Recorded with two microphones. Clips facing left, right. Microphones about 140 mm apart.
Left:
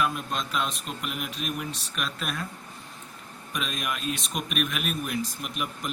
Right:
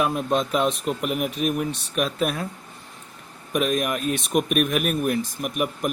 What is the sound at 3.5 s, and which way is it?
Speech, 55° right (ahead or behind).